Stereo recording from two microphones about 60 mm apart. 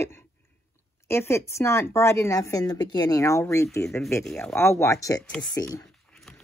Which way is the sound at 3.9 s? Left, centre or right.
Left.